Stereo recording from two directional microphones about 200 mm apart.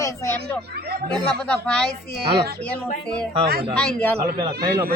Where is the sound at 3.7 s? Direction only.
10° left (ahead or behind).